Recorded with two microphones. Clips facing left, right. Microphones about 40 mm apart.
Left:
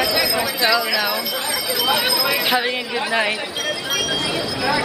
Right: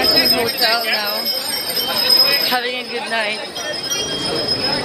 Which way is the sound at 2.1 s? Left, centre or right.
Centre.